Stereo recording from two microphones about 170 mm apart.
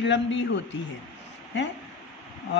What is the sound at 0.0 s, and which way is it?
Speech, 90° left.